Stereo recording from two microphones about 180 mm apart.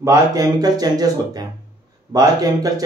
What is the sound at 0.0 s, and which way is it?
A man's voice, 20° right (ahead or behind).